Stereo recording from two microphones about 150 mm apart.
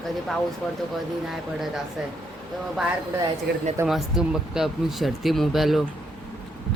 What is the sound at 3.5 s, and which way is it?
Speech, 90° right.